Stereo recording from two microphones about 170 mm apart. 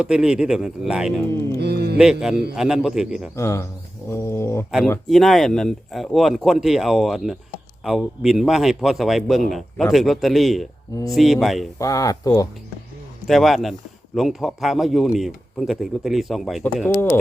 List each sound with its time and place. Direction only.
0.0 s a man's voice: 5° right (ahead or behind)
1.5 s music: 70° right (ahead or behind)
2.0 s a man's voice: 5° right (ahead or behind)
3.3 s a sound: 15° left (ahead or behind)
5.0 s a man's voice: centre (ahead or behind)
11.8 s speech: 20° left (ahead or behind)
13.2 s a man's voice: centre (ahead or behind)
16.8 s a sound: 15° left (ahead or behind)